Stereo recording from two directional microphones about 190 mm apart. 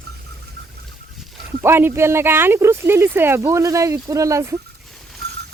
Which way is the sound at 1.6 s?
10° right (ahead or behind).